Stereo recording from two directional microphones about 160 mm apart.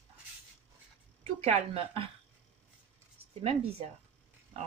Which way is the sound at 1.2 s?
40° right (ahead or behind).